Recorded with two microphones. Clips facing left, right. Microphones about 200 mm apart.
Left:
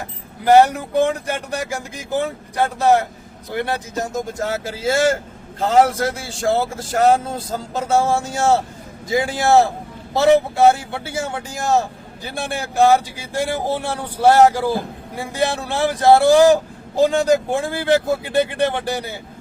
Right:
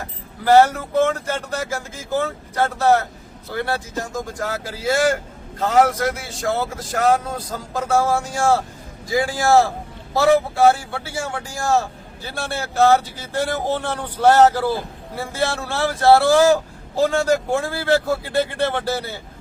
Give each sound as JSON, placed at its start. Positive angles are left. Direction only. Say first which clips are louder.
{"t": 0.0, "sound": "speech", "louder": "left 2 dB", "side_deg": 15}